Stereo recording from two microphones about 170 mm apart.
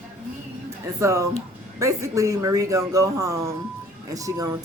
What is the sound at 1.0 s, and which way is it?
Speech, 15° right (ahead or behind).